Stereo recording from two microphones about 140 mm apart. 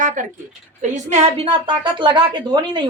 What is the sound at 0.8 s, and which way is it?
A woman's voice, 55° right (ahead or behind).